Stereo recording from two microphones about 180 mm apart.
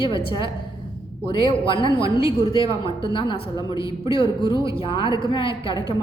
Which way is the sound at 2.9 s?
30° left (ahead or behind).